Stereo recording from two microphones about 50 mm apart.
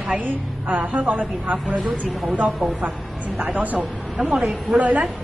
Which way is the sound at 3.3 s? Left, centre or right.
Right.